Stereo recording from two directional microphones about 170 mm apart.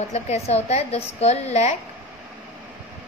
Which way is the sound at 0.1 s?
40° left (ahead or behind).